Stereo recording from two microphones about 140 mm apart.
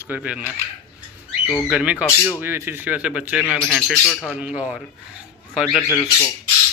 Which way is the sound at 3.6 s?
5° left (ahead or behind).